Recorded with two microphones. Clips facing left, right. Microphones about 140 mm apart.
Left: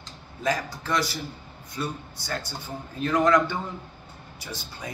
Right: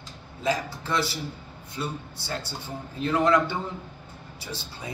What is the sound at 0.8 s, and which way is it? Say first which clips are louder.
Speech: left 1 dB; 25° right (ahead or behind).